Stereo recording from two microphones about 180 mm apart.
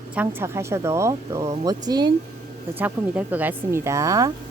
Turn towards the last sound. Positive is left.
turn(degrees=-20)  # may be behind; listen again after turning